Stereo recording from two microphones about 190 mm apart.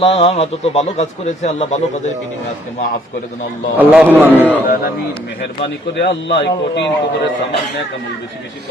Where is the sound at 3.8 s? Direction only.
5° right (ahead or behind).